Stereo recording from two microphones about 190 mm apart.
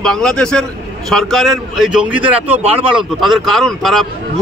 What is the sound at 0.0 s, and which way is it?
Speech, 5° left (ahead or behind).